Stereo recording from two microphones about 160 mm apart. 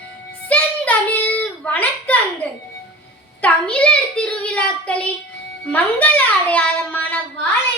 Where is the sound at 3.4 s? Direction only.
5° left (ahead or behind).